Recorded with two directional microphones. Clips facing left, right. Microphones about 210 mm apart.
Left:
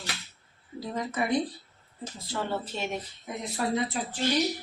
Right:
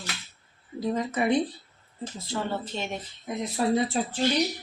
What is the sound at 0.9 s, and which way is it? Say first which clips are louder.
Speech: right 2 dB; 20° right (ahead or behind).